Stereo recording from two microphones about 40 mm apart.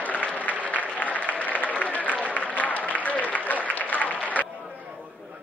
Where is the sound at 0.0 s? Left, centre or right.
Left.